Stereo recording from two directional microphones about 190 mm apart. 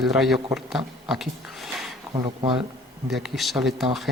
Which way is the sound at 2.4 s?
25° right (ahead or behind).